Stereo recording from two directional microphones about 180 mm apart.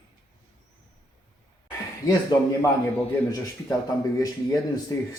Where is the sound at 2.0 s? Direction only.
20° left (ahead or behind).